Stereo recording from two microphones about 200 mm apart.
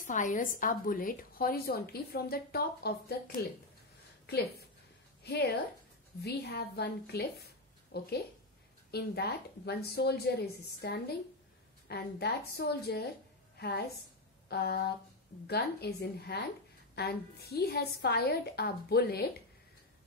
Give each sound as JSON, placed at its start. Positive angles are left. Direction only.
{"t": 0.0, "sound": "a woman's voice", "side_deg": 40}
{"t": 5.2, "sound": "a woman's voice", "side_deg": 55}